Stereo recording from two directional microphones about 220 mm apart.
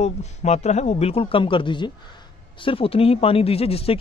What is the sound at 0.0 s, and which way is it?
A man's voice, 30° left (ahead or behind).